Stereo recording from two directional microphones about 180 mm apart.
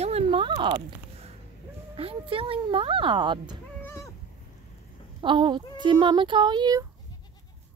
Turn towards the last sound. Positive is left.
turn(degrees=-25)  # may be behind; listen again after turning